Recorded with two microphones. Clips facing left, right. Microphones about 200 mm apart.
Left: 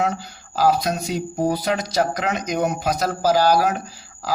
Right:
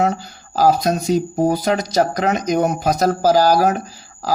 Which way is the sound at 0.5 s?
45° right (ahead or behind).